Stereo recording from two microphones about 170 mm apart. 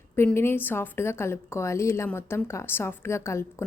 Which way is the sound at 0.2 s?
15° left (ahead or behind).